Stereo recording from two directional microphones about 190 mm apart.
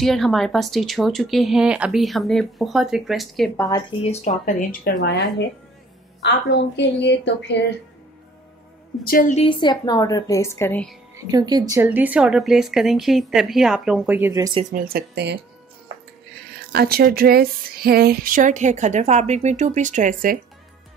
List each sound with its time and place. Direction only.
0.0 s speech: centre (ahead or behind)
3.5 s speech: 20° left (ahead or behind)
4.0 s speech: 35° left (ahead or behind)
6.2 s a woman's voice: 65° left (ahead or behind)
9.0 s a woman's voice: 45° left (ahead or behind)
9.4 s speech: 25° left (ahead or behind); by 11.0 s 5° left (ahead or behind)
11.3 s speech: 20° right (ahead or behind)
14.7 s speech: 50° right (ahead or behind)
16.7 s speech: 55° right (ahead or behind)